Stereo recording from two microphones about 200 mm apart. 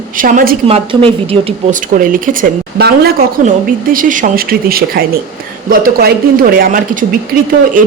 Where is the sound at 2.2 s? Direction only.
45° right (ahead or behind).